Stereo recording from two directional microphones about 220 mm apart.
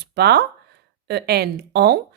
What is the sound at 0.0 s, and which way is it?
Speech, 50° right (ahead or behind).